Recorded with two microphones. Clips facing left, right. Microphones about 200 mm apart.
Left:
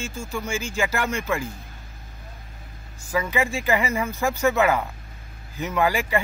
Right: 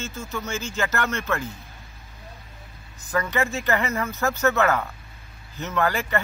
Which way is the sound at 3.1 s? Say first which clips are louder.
Left 1 dB; 10° left (ahead or behind).